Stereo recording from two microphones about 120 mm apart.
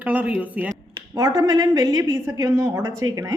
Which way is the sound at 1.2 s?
30° right (ahead or behind).